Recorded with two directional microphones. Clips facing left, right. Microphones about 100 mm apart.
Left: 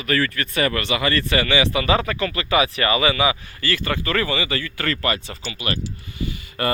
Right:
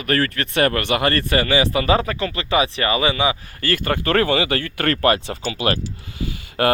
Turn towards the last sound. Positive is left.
turn(degrees=-80)